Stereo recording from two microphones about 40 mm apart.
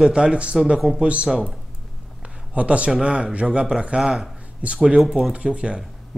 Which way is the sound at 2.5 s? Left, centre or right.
Right.